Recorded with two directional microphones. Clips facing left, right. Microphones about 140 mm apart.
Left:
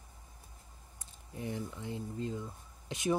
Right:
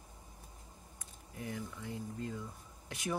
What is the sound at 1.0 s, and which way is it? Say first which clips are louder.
Speech: left 4 dB; 25° left (ahead or behind).